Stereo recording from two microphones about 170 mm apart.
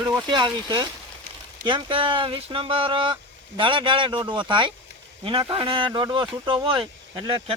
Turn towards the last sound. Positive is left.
turn(degrees=-30)  # may be behind; listen again after turning